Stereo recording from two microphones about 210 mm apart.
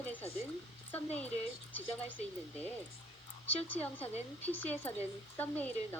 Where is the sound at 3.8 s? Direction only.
10° left (ahead or behind).